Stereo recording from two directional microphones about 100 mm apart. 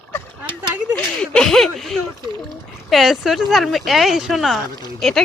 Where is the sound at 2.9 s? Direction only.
Centre (ahead or behind).